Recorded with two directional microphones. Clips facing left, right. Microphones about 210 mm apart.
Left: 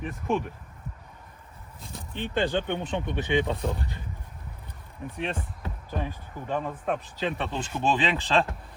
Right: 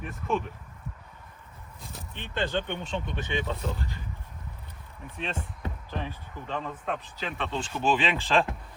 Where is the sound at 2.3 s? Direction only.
15° left (ahead or behind).